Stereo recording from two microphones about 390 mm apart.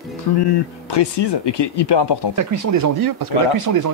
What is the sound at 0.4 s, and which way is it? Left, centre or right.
Speech, left.